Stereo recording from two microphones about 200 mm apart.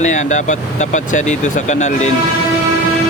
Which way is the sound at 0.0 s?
35° left (ahead or behind).